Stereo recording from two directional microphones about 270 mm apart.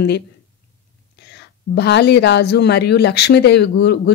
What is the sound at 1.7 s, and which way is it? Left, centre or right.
Speech, left.